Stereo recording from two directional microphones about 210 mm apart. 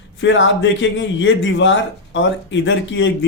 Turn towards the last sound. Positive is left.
turn(degrees=60)  # may be behind; listen again after turning